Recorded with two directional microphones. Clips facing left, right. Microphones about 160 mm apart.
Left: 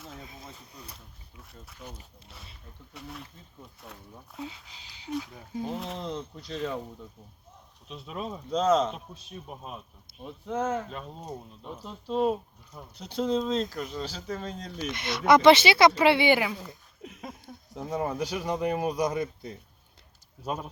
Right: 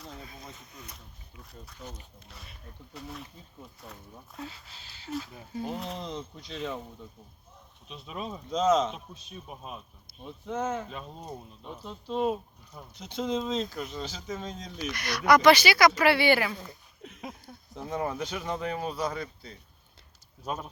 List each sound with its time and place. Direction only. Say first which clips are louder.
0.5 s speech: left 1 dB; 35° left (ahead or behind)
0.9 s speech: right 1 dB; centre (ahead or behind)
4.4 s speech: left 2 dB; 15° left (ahead or behind)
5.6 s speech: left 1 dB; centre (ahead or behind)
7.9 s speech: left 2 dB; centre (ahead or behind)
14.8 s speech: left 1 dB; 25° left (ahead or behind)
16.6 s speech: left 1 dB; centre (ahead or behind); by 19.5 s 20° left (ahead or behind)
20.4 s speech: left 2 dB; 10° left (ahead or behind)